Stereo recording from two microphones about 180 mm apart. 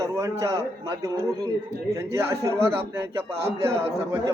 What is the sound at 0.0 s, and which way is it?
Speech, 15° right (ahead or behind).